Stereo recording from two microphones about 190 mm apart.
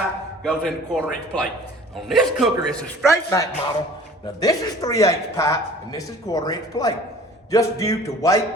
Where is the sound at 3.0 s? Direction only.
15° left (ahead or behind).